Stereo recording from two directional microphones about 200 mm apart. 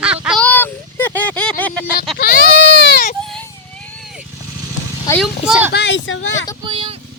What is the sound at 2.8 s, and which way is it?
Baby cry, 55° left (ahead or behind).